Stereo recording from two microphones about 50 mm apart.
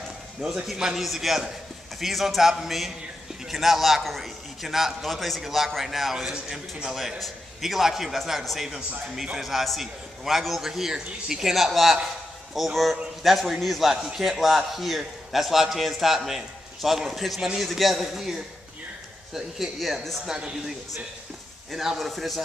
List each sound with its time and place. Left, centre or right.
0.4 s a man's voice: centre
20.2 s a man's voice: centre
21.7 s a man's voice: centre